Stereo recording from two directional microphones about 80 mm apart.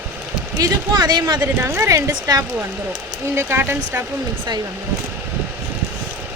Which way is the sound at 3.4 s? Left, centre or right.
Right.